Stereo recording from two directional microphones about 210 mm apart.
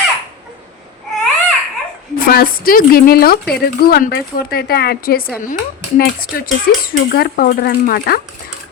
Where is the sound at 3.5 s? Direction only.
45° left (ahead or behind).